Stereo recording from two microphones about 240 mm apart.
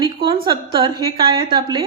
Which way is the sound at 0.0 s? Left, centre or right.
Centre.